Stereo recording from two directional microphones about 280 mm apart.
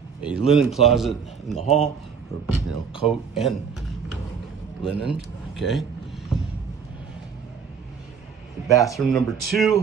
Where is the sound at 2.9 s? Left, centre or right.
Centre.